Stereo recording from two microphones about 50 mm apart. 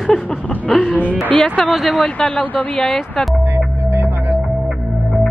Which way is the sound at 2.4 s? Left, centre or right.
Left.